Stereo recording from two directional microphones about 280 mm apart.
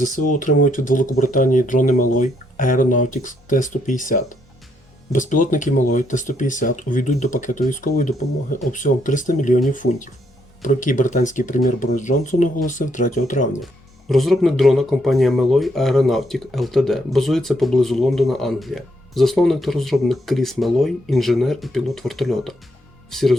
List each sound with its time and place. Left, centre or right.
0.3 s speech: left
14.1 s speech: centre